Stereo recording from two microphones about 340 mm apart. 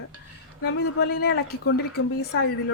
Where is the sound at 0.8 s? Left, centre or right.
Left.